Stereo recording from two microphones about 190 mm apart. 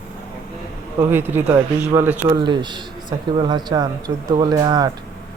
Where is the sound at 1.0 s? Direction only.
10° right (ahead or behind).